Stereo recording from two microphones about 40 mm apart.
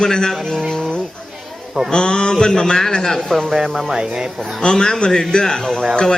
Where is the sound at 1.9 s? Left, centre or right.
Left.